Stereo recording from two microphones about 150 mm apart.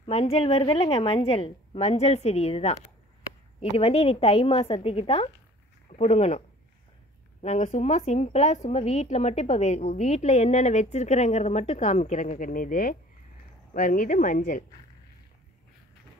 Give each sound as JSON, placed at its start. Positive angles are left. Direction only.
{"t": 0.0, "sound": "a woman's voice", "side_deg": 40}
{"t": 7.4, "sound": "speech", "side_deg": 50}